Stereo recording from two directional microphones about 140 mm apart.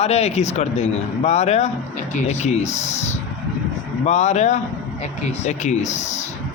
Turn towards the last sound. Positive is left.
turn(degrees=60)  # may be behind; listen again after turning